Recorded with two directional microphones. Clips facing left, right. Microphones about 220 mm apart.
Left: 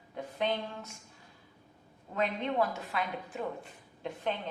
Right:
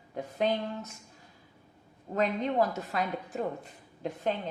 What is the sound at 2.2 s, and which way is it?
A woman's voice, 40° right (ahead or behind).